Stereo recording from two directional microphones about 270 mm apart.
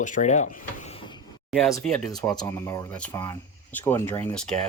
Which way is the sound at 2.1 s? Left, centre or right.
Centre.